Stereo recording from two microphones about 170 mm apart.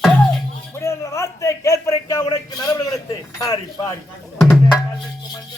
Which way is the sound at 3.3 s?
20° left (ahead or behind).